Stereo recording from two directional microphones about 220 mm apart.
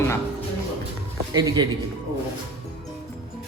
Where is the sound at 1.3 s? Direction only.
15° right (ahead or behind).